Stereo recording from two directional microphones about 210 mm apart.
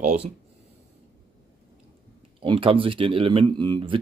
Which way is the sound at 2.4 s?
25° right (ahead or behind).